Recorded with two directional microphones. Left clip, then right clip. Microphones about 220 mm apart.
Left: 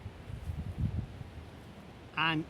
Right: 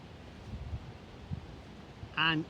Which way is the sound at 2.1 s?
25° left (ahead or behind).